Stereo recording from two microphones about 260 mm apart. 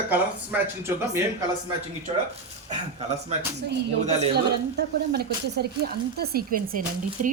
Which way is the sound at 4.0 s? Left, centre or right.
Right.